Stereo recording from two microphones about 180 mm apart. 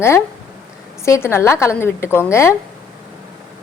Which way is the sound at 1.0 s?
15° left (ahead or behind).